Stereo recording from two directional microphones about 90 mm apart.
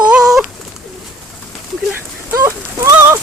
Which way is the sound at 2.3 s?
30° right (ahead or behind).